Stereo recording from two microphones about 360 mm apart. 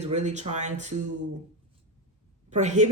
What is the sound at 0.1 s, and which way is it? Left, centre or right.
Speech, centre.